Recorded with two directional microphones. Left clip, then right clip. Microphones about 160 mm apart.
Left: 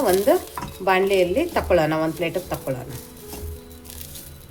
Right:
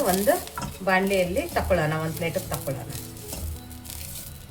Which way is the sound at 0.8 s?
60° left (ahead or behind).